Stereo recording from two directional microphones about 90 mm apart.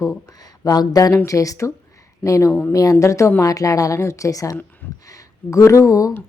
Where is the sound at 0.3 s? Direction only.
45° left (ahead or behind).